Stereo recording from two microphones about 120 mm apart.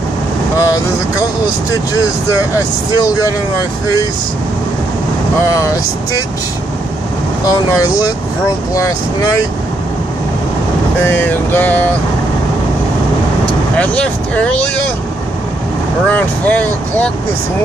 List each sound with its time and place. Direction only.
0.6 s speech: 30° left (ahead or behind)
3.0 s speech: 30° left (ahead or behind)
7.4 s speech: 30° left (ahead or behind)
11.0 s speech: 15° left (ahead or behind)
13.7 s speech: 10° left (ahead or behind)
16.1 s speech: 10° left (ahead or behind)